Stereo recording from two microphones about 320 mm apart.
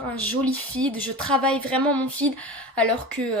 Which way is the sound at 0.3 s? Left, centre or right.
Centre.